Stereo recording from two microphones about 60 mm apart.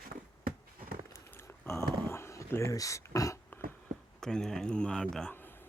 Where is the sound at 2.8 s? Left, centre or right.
Left.